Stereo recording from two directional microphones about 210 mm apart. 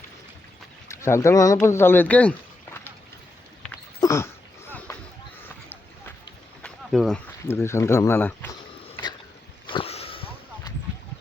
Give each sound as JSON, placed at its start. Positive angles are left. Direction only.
{"t": 0.9, "sound": "speech", "side_deg": 15}
{"t": 4.0, "sound": "dog", "side_deg": 15}
{"t": 5.4, "sound": "run", "side_deg": 10}
{"t": 6.6, "sound": "a sound", "side_deg": 5}
{"t": 7.4, "sound": "speech", "side_deg": 10}
{"t": 9.6, "sound": "a sound", "side_deg": 25}